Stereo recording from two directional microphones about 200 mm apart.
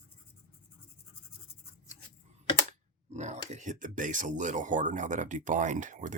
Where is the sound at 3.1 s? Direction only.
35° right (ahead or behind).